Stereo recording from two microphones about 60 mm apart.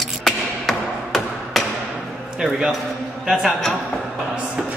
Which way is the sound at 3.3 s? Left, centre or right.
Centre.